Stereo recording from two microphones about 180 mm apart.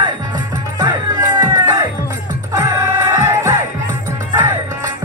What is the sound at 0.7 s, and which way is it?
Music, 20° right (ahead or behind).